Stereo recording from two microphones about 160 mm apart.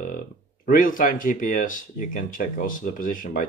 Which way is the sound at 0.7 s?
60° left (ahead or behind).